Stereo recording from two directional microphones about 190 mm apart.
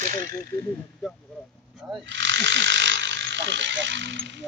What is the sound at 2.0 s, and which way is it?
Electric shaver, 70° right (ahead or behind).